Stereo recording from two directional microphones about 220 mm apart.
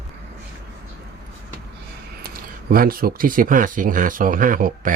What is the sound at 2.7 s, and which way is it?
Speech, 40° right (ahead or behind).